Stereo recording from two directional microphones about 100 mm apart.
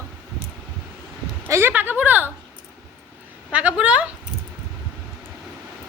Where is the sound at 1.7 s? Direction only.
15° right (ahead or behind).